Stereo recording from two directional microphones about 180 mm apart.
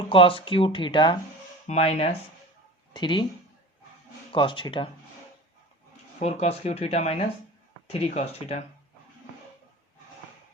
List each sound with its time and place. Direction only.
0.1 s speech: 30° left (ahead or behind)
1.6 s speech: 35° left (ahead or behind)
4.3 s speech: 25° left (ahead or behind)
6.1 s speech: 40° left (ahead or behind)